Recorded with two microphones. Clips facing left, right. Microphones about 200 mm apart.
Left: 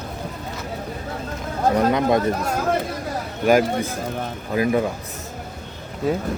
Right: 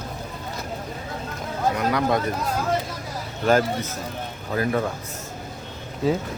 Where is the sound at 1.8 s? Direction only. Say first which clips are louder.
Left 4 dB; 25° left (ahead or behind).